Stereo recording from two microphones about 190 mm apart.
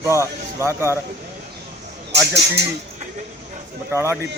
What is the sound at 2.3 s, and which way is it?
Speech, 60° right (ahead or behind).